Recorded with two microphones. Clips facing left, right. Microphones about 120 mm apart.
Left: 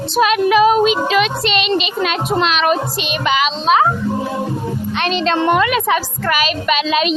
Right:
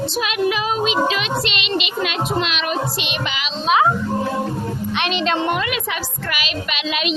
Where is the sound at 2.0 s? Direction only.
40° left (ahead or behind).